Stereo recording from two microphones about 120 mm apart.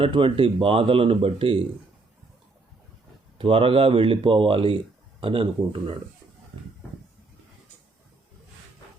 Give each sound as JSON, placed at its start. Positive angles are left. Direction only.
{"t": 0.0, "sound": "speech", "side_deg": -50}
{"t": 3.3, "sound": "speech", "side_deg": -50}